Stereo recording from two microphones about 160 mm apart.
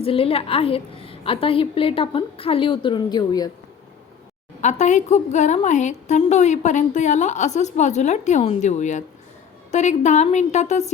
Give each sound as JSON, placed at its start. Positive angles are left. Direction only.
{"t": 0.0, "sound": "a woman's voice", "side_deg": 35}
{"t": 4.6, "sound": "a woman's voice", "side_deg": 45}